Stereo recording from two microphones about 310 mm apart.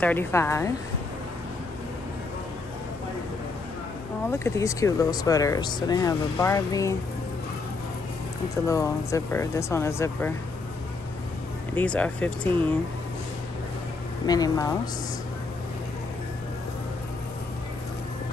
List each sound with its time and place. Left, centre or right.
0.0 s speech: centre
4.3 s speech: centre
8.6 s speech: centre
11.7 s speech: centre
14.2 s speech: centre